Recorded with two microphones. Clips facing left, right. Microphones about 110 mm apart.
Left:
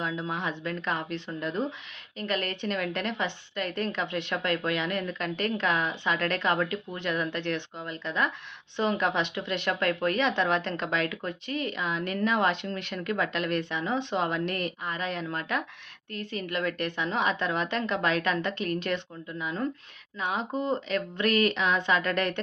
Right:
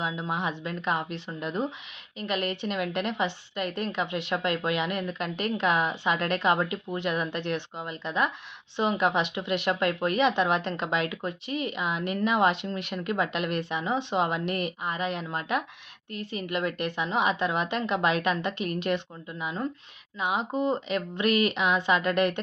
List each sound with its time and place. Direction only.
0.0 s speech: 15° right (ahead or behind)